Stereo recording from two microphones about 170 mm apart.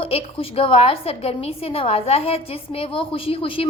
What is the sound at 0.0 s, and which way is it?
A woman's voice, 35° left (ahead or behind).